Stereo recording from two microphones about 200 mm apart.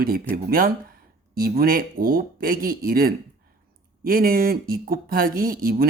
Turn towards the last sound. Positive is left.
turn(degrees=-45)  # may be behind; listen again after turning